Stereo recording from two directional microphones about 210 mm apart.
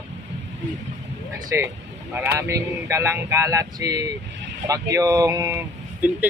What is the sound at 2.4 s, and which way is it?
Speech, 15° right (ahead or behind).